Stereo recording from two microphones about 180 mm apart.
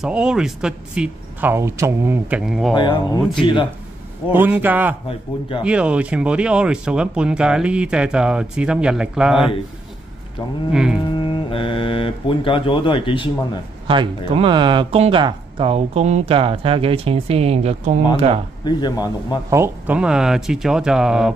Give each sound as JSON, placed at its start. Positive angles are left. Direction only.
{"t": 0.0, "sound": "speech", "side_deg": -5}
{"t": 2.7, "sound": "speech", "side_deg": 25}
{"t": 4.3, "sound": "a man's voice", "side_deg": -10}
{"t": 10.7, "sound": "speech", "side_deg": -5}
{"t": 11.1, "sound": "speech", "side_deg": 25}
{"t": 13.8, "sound": "speech", "side_deg": -30}
{"t": 18.6, "sound": "speech", "side_deg": 25}
{"t": 19.5, "sound": "speech", "side_deg": -10}